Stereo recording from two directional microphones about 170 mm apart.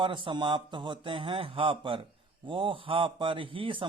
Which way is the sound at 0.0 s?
30° right (ahead or behind).